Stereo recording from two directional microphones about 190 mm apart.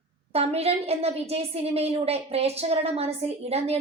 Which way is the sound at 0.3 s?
30° right (ahead or behind).